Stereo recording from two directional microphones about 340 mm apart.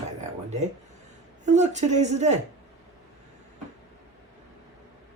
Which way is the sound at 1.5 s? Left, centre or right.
Centre.